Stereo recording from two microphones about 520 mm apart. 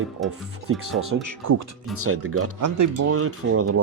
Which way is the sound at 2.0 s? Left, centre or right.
Right.